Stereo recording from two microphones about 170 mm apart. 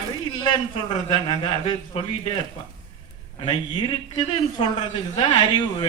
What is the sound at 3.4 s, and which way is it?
Speech, 30° left (ahead or behind).